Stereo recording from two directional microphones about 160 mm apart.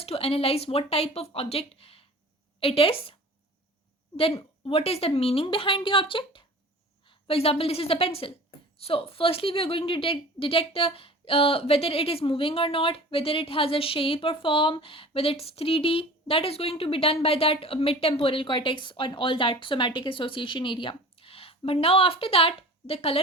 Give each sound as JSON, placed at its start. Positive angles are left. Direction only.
{"t": 0.0, "sound": "a woman's voice", "side_deg": 35}
{"t": 4.2, "sound": "a woman's voice", "side_deg": 35}